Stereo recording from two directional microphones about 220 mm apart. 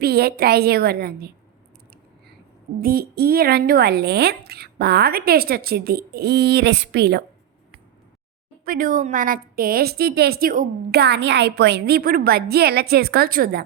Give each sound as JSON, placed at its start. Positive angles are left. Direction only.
{"t": 0.0, "sound": "a woman's voice", "side_deg": -45}
{"t": 2.7, "sound": "a woman's voice", "side_deg": -40}
{"t": 8.6, "sound": "a woman's voice", "side_deg": -40}